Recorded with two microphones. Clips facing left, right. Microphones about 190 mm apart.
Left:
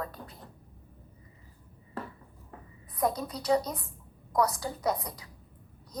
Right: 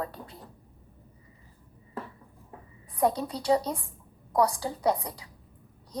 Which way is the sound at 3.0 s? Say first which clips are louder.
Right 3 dB; 30° right (ahead or behind).